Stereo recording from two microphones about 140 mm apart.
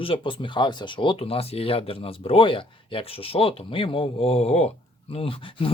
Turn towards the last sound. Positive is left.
turn(degrees=40)  # may be behind; listen again after turning